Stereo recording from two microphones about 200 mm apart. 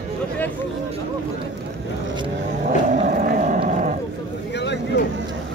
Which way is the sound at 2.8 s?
40° right (ahead or behind).